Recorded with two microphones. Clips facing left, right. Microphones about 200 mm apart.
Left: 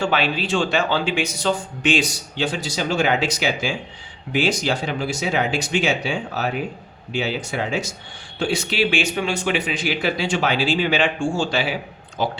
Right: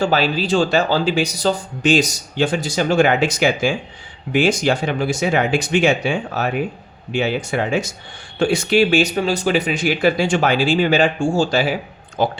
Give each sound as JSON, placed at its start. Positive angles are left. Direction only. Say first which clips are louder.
{"t": 0.0, "sound": "speech", "louder": "right 4 dB", "side_deg": -40}